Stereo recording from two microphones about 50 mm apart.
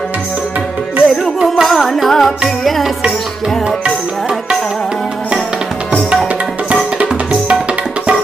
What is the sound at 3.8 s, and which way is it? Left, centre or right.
Music, centre.